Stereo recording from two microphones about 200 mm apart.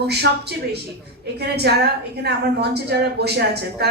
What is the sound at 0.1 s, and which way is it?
A woman's voice, 55° right (ahead or behind).